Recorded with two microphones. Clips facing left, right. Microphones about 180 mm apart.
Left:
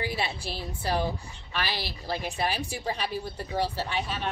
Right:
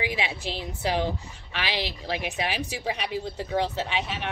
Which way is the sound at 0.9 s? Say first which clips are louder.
Right 2 dB; 20° right (ahead or behind).